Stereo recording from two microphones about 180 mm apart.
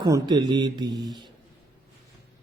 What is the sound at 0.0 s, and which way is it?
Speech, 20° right (ahead or behind).